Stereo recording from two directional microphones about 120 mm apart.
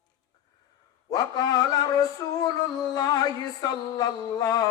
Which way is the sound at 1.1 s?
35° left (ahead or behind).